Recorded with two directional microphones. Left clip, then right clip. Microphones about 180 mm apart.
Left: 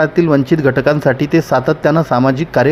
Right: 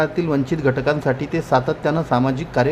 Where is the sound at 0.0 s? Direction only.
30° left (ahead or behind).